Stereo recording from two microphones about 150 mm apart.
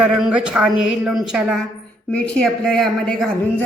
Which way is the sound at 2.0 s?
5° left (ahead or behind).